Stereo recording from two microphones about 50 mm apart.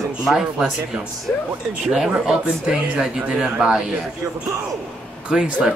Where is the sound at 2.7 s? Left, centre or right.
Centre.